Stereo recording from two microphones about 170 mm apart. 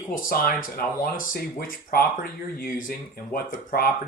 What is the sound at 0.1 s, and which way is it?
Speech, 55° left (ahead or behind).